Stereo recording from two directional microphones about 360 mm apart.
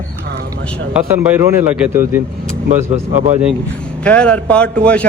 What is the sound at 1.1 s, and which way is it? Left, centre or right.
A man's voice, centre.